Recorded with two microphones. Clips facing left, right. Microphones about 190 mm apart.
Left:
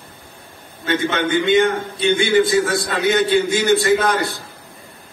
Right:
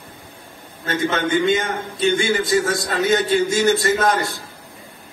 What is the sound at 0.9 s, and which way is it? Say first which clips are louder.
A man's voice: left 1 dB; 40° right (ahead or behind).